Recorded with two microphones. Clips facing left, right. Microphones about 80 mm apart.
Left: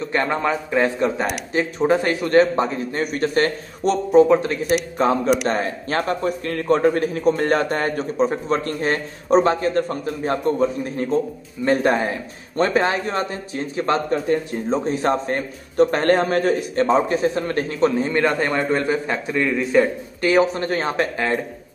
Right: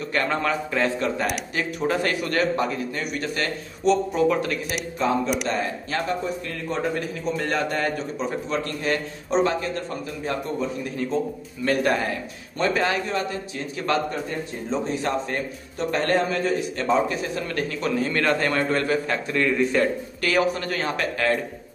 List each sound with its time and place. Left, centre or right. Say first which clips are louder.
0.3 s a man's voice: left 3 dB; centre
4.9 s speech: left 2 dB; left
11.6 s a man's voice: left 4 dB; left
12.5 s a man's voice: left 4 dB; left
16.8 s a man's voice: left 6 dB; left